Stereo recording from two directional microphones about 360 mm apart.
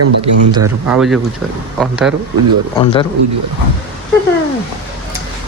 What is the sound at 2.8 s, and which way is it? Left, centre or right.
Speech, centre.